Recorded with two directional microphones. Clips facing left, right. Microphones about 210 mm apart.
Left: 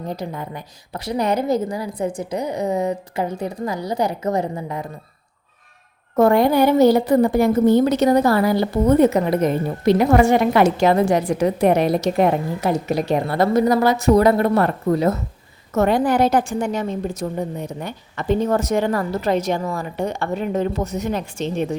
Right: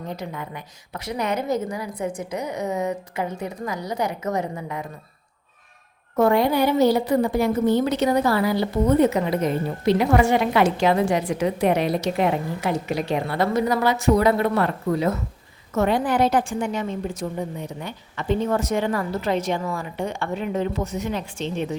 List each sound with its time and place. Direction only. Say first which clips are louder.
0.1 s a woman's voice: left 4 dB; 35° left (ahead or behind)
6.1 s a woman's voice: left 4 dB; 45° left (ahead or behind)